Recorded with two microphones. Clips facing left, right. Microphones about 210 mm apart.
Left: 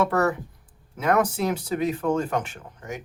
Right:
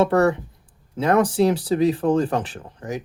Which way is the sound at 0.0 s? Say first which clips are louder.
Right 5 dB; 30° right (ahead or behind).